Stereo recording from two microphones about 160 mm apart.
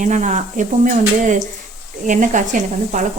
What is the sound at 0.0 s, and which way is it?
Speech, 50° right (ahead or behind).